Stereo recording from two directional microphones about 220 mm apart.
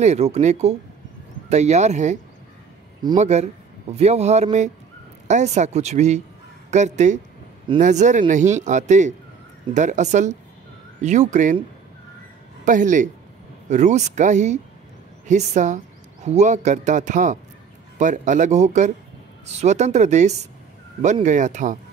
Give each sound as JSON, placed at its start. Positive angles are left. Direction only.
{"t": 0.0, "sound": "speech", "side_deg": -30}
{"t": 3.2, "sound": "speech", "side_deg": -30}
{"t": 12.6, "sound": "speech", "side_deg": -35}